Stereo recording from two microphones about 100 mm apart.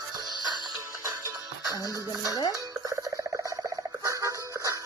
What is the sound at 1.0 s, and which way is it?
Music, 30° right (ahead or behind).